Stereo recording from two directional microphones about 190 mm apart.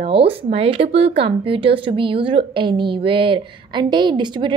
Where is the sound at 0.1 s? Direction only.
30° right (ahead or behind).